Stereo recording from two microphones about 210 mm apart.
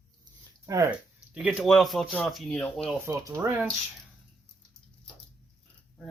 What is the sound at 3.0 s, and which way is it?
Speech, 15° right (ahead or behind).